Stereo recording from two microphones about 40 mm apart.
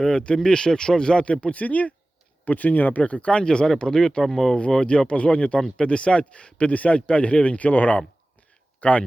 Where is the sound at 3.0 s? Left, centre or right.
Left.